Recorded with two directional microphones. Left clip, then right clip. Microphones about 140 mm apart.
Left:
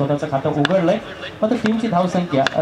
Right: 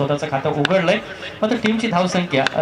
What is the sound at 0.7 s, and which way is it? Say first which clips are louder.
Speech: even; 25° right (ahead or behind).